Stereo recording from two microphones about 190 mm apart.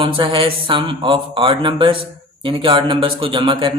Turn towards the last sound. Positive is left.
turn(degrees=-25)  # may be behind; listen again after turning